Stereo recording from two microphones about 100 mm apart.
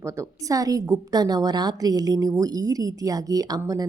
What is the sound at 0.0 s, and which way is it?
A woman's voice, 30° right (ahead or behind).